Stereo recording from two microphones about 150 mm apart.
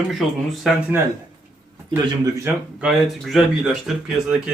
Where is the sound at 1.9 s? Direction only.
30° right (ahead or behind).